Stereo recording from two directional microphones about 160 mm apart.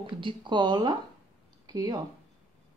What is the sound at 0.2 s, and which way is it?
Speech, 30° right (ahead or behind).